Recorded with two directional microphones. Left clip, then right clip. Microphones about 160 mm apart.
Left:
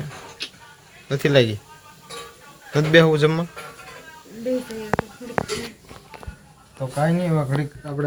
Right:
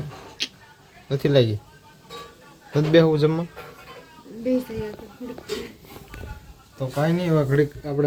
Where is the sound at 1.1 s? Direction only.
5° right (ahead or behind).